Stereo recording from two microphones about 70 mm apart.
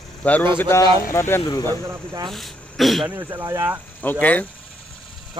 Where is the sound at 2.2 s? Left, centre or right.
Centre.